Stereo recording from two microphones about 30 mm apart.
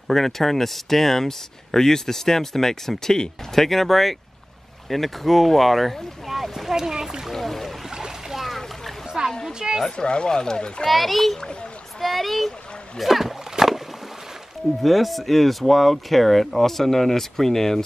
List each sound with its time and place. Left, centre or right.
0.1 s speech: centre
3.6 s speech: centre
6.7 s speech: centre
7.3 s speech: centre
8.3 s splash: centre
9.2 s a sound: right
9.5 s a woman's voice: right
9.8 s speech: left
10.9 s speech: centre
12.0 s a sound: centre
13.0 s a sound: centre
14.8 s speech: centre